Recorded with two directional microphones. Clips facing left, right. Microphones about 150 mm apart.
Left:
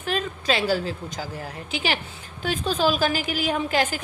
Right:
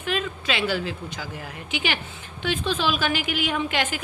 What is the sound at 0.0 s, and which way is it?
A woman's voice, 40° left (ahead or behind).